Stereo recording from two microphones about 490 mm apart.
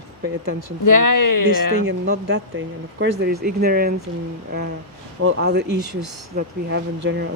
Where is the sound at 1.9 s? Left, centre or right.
Right.